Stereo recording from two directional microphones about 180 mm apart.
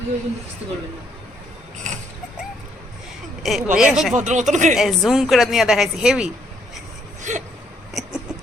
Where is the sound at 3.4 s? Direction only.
Centre (ahead or behind).